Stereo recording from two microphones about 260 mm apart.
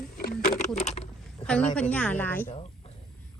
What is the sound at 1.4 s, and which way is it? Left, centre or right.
A woman's voice, centre.